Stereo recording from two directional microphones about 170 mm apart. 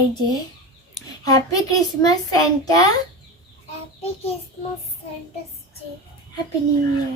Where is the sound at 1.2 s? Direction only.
20° left (ahead or behind).